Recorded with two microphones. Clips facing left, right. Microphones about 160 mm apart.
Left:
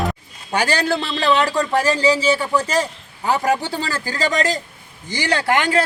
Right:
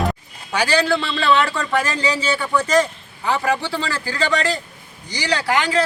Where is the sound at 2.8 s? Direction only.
40° left (ahead or behind).